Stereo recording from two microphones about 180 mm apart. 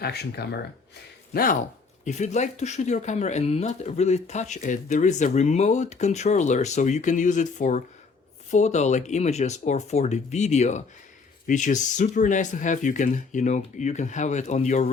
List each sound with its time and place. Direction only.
0.0 s speech: 65° left (ahead or behind)
1.3 s speech: 50° left (ahead or behind)
2.0 s speech: 40° left (ahead or behind)